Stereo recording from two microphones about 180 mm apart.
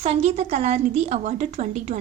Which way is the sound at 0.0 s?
40° right (ahead or behind).